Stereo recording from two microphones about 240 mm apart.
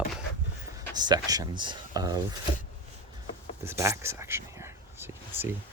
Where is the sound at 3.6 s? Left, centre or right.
Centre.